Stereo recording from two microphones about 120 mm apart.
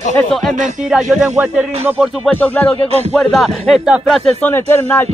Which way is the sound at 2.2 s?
15° left (ahead or behind).